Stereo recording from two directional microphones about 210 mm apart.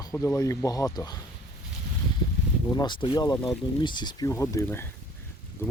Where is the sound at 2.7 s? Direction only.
20° left (ahead or behind).